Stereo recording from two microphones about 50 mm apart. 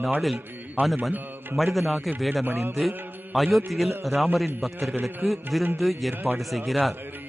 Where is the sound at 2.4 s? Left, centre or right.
Right.